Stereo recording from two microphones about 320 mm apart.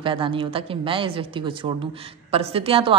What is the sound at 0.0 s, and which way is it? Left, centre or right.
A woman's voice, centre.